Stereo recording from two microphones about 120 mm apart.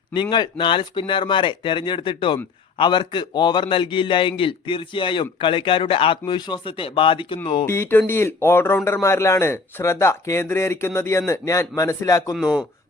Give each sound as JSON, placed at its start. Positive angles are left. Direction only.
{"t": 0.1, "sound": "speech", "side_deg": 40}
{"t": 7.6, "sound": "a man's voice", "side_deg": 20}
{"t": 12.3, "sound": "speech", "side_deg": -5}